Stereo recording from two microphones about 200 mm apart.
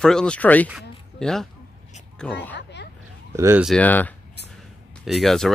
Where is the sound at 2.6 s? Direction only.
60° left (ahead or behind).